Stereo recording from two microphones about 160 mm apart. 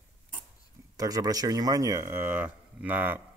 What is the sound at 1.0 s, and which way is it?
Speech, 20° right (ahead or behind).